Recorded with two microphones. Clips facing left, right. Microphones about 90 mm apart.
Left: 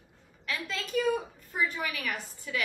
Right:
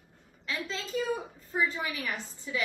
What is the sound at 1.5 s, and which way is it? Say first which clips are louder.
A woman's voice: right 1 dB; 25° right (ahead or behind).